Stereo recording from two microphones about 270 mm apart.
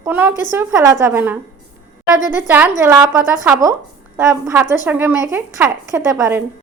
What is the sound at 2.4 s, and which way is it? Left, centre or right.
A woman's voice, centre.